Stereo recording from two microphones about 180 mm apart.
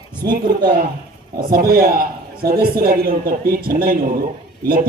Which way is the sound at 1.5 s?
55° right (ahead or behind).